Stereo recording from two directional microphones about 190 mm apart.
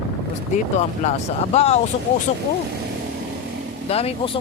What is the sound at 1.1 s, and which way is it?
Speech, 35° left (ahead or behind).